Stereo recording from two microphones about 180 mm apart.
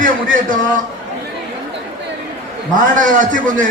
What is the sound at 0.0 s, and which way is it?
Speech, 50° right (ahead or behind).